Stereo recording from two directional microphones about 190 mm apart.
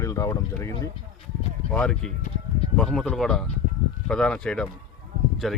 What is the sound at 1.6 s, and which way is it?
Speech, 5° left (ahead or behind).